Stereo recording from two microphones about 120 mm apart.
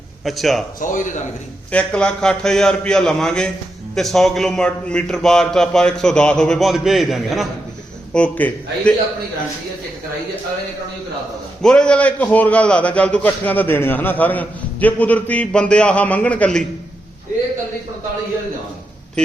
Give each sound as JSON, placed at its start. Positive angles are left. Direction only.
{"t": 0.3, "sound": "a man's voice", "side_deg": 0}
{"t": 0.8, "sound": "speech", "side_deg": 90}
{"t": 1.7, "sound": "a man's voice", "side_deg": 10}
{"t": 8.1, "sound": "a man's voice", "side_deg": 10}
{"t": 11.6, "sound": "a man's voice", "side_deg": 5}